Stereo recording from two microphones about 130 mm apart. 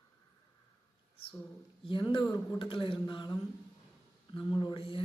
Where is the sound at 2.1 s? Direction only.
30° left (ahead or behind).